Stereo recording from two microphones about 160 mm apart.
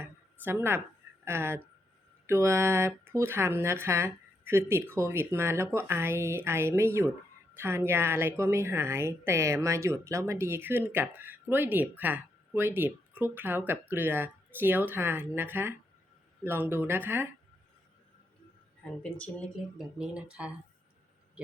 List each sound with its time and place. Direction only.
0.0 s a woman's voice: 15° right (ahead or behind)
18.8 s speech: 10° left (ahead or behind)
20.0 s speech: 5° right (ahead or behind)